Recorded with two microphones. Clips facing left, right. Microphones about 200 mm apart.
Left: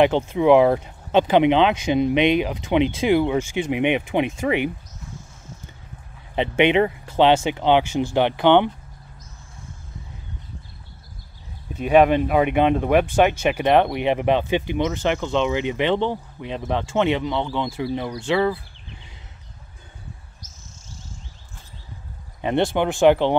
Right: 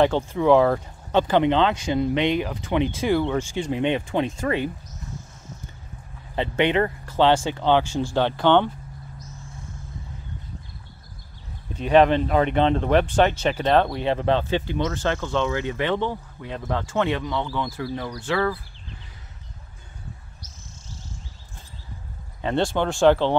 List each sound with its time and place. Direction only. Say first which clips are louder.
0.0 s speech: left 2 dB; 20° left (ahead or behind)
6.3 s speech: left 3 dB; 20° left (ahead or behind)
11.7 s speech: left 1 dB; 10° left (ahead or behind)
22.4 s speech: left 2 dB; 20° left (ahead or behind)